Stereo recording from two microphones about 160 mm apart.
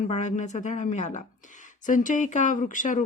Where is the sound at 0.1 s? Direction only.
50° left (ahead or behind).